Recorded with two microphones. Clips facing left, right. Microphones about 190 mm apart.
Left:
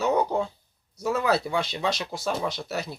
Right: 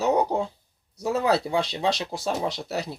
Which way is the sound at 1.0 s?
30° right (ahead or behind).